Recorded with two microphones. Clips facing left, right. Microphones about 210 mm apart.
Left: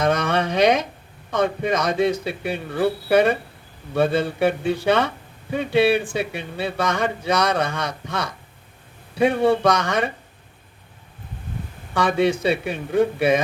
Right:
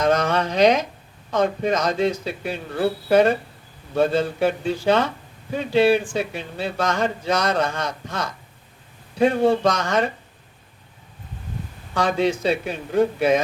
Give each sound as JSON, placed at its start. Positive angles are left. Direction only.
{"t": 0.0, "sound": "speech", "side_deg": 60}
{"t": 11.9, "sound": "speech", "side_deg": 60}